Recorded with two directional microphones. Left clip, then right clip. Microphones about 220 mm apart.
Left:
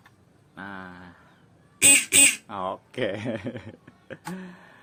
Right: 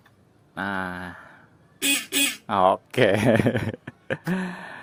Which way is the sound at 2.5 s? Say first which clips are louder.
Right 12 dB; 50° right (ahead or behind).